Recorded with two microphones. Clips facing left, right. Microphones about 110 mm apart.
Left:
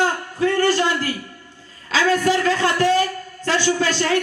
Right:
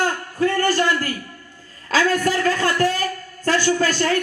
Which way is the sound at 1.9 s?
45° right (ahead or behind).